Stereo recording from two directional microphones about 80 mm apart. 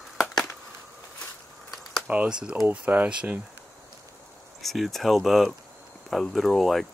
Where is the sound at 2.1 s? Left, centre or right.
Centre.